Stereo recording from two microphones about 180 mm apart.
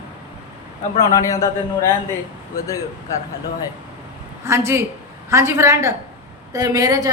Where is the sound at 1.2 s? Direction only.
15° left (ahead or behind).